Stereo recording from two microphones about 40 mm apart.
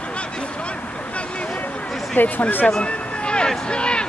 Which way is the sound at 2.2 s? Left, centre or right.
Left.